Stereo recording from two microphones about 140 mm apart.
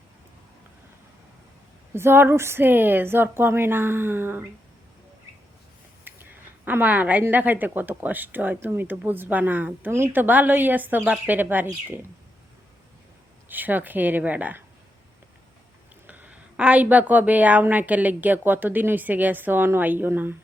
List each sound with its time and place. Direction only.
1.9 s speech: 15° right (ahead or behind)
6.1 s a sound: 15° right (ahead or behind)
6.7 s speech: 10° right (ahead or behind)
13.5 s speech: 15° right (ahead or behind)
16.0 s speech: 10° right (ahead or behind)